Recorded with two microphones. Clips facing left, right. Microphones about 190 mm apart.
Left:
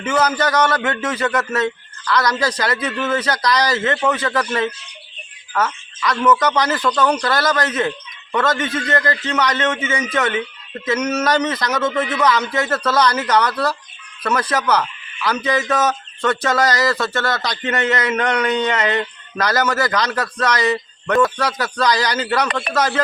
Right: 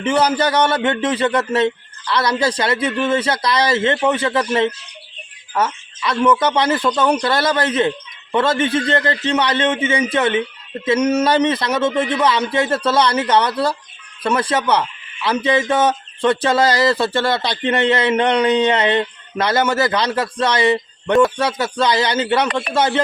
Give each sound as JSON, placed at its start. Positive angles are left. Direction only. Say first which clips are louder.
{"t": 0.0, "sound": "a woman's voice", "louder": "right 2 dB", "side_deg": -30}
{"t": 5.5, "sound": "speech", "louder": "right 1 dB", "side_deg": -25}